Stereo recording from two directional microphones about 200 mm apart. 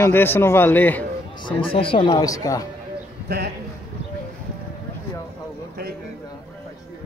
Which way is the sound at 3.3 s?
50° right (ahead or behind).